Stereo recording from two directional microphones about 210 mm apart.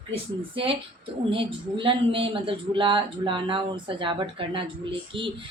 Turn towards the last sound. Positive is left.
turn(degrees=-25)  # may be behind; listen again after turning